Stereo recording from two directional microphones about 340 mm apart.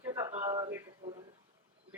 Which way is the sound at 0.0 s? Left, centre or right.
Centre.